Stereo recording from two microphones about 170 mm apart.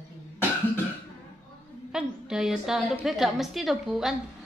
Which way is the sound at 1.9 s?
5° right (ahead or behind).